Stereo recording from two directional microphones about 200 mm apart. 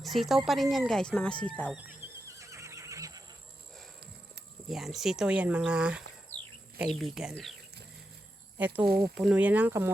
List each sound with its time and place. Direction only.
0.0 s speech: centre (ahead or behind)
1.7 s neigh: 10° right (ahead or behind)
4.7 s speech: centre (ahead or behind)
8.5 s speech: 10° right (ahead or behind)
8.9 s speech: 50° right (ahead or behind)
9.1 s speech: 5° right (ahead or behind)